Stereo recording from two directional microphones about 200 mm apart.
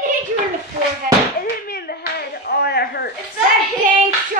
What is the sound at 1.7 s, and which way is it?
Clapping, 50° left (ahead or behind).